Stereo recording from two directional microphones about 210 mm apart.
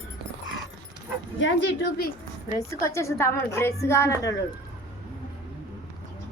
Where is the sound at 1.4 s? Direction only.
55° left (ahead or behind).